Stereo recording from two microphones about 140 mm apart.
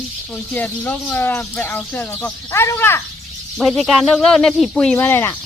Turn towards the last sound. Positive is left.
turn(degrees=15)  # may be behind; listen again after turning